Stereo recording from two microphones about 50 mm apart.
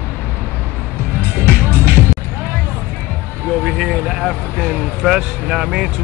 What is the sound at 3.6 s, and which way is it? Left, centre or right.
Vehicle, centre.